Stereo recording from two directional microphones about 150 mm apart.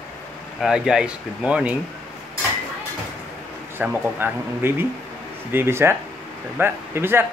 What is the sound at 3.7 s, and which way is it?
Speech, 15° right (ahead or behind).